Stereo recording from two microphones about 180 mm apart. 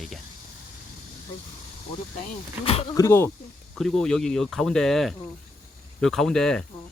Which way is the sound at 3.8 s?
Centre (ahead or behind).